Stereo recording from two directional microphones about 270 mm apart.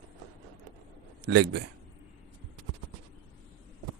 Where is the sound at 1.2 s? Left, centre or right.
Right.